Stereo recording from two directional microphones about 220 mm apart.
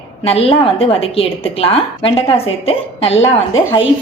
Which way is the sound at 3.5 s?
60° left (ahead or behind).